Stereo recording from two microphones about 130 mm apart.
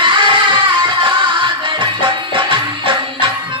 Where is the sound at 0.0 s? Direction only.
40° right (ahead or behind).